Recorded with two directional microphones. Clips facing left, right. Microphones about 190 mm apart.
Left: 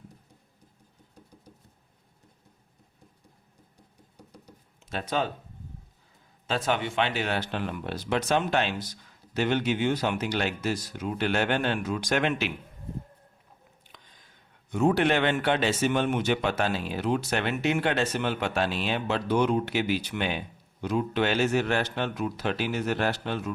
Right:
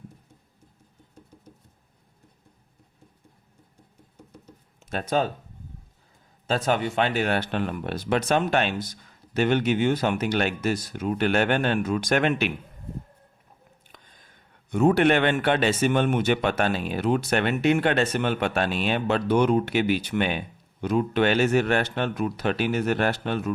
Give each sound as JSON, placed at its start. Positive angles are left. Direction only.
{"t": 4.9, "sound": "speech", "side_deg": -45}
{"t": 6.5, "sound": "speech", "side_deg": -40}
{"t": 13.9, "sound": "a sound", "side_deg": -50}
{"t": 14.7, "sound": "a man's voice", "side_deg": -55}